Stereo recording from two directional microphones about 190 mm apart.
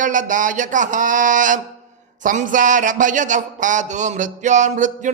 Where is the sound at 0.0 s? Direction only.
40° right (ahead or behind).